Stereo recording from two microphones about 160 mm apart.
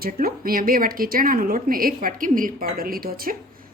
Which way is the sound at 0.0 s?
65° right (ahead or behind).